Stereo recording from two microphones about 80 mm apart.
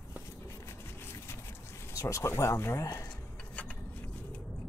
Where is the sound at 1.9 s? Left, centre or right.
Left.